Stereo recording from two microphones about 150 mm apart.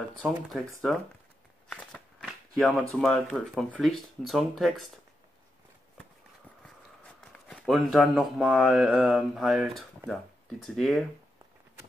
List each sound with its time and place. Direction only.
0.2 s speech: centre (ahead or behind)
1.7 s shuffling cards: 5° left (ahead or behind)
3.0 s speech: 5° left (ahead or behind)
6.6 s speech: 5° left (ahead or behind)